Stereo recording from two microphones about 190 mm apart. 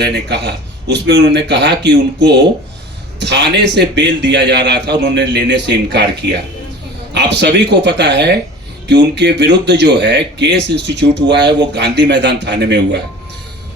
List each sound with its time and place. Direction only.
0.0 s a man's voice: 60° right (ahead or behind)
7.1 s a man's voice: 65° right (ahead or behind)